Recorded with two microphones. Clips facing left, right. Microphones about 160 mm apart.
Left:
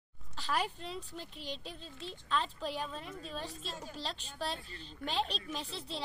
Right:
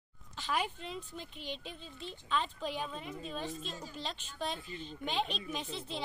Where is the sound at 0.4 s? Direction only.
Centre (ahead or behind).